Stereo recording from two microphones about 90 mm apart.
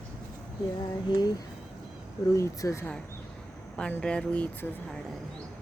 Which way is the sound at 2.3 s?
35° left (ahead or behind).